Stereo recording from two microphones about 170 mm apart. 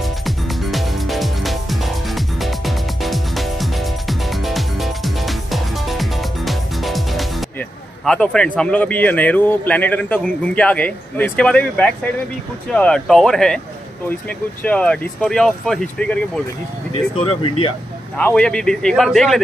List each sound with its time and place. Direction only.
0.0 s music: centre (ahead or behind)
8.0 s a man's voice: 5° left (ahead or behind)
14.6 s speech: 5° left (ahead or behind)
17.1 s speech: 30° left (ahead or behind)
18.1 s speech: 5° left (ahead or behind)